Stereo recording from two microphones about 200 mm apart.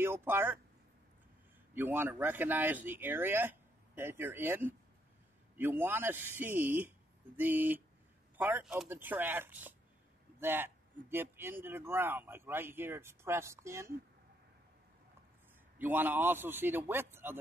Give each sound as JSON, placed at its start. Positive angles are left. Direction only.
{"t": 0.0, "sound": "speech", "side_deg": -10}
{"t": 1.7, "sound": "speech", "side_deg": -10}
{"t": 15.8, "sound": "speech", "side_deg": -10}